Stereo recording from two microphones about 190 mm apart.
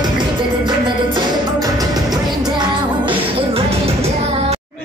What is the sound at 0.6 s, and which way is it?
Music, 20° right (ahead or behind).